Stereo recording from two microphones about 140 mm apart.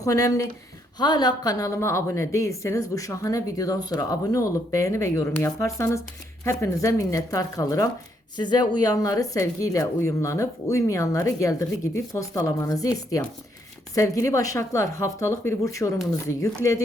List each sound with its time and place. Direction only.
0.0 s speech: 25° left (ahead or behind)
13.9 s speech: 20° left (ahead or behind)